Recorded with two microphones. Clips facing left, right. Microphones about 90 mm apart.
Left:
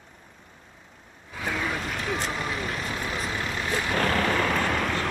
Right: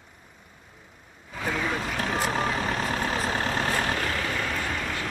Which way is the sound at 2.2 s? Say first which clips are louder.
Right 4 dB; 60° right (ahead or behind).